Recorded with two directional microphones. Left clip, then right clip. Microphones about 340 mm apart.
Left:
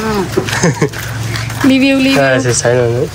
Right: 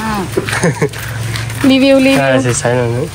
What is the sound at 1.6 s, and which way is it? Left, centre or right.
Speech, centre.